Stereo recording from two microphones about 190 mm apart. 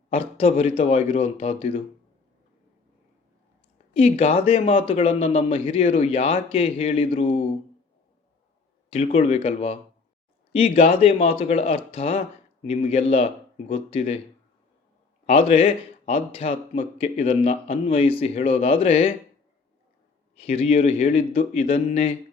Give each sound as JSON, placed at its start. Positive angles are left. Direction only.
{"t": 0.1, "sound": "a man's voice", "side_deg": 30}
{"t": 3.9, "sound": "a man's voice", "side_deg": 30}
{"t": 8.9, "sound": "speech", "side_deg": 30}
{"t": 15.3, "sound": "speech", "side_deg": 30}
{"t": 20.4, "sound": "speech", "side_deg": 30}